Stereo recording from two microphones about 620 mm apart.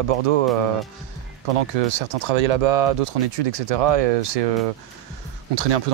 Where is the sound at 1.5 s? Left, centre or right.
Right.